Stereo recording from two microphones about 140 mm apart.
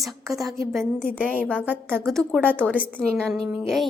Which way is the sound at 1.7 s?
15° right (ahead or behind).